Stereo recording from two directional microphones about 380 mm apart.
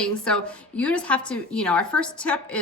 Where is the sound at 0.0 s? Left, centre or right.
Centre.